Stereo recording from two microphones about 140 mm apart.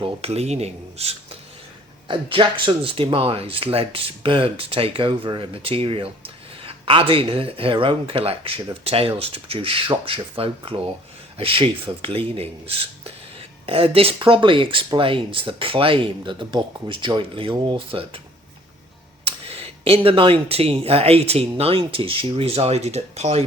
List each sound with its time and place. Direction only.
0.0 s speech: 45° right (ahead or behind)
2.0 s speech: 35° right (ahead or behind)
19.2 s speech: 45° right (ahead or behind)